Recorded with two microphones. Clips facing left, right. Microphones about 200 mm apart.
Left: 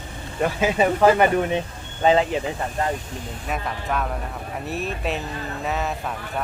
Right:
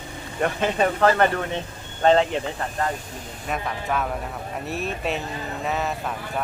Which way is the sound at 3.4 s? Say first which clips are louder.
Right 1 dB; centre (ahead or behind).